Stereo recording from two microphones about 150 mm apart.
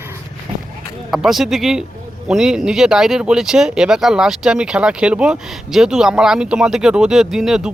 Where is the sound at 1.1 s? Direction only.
Centre (ahead or behind).